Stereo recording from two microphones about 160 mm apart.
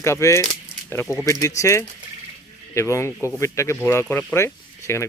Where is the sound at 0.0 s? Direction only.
15° left (ahead or behind).